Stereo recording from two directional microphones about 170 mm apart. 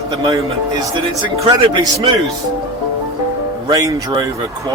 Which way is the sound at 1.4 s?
30° right (ahead or behind).